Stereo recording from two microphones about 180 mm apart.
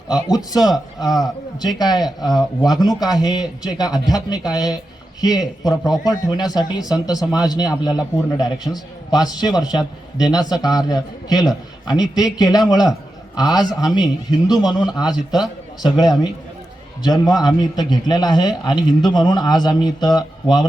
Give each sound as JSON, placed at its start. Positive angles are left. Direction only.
{"t": 0.2, "sound": "a man's voice", "side_deg": 20}
{"t": 0.5, "sound": "a man's voice", "side_deg": 0}
{"t": 1.5, "sound": "a man's voice", "side_deg": 20}